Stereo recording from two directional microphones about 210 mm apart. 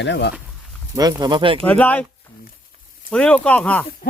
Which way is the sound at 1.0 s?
20° right (ahead or behind).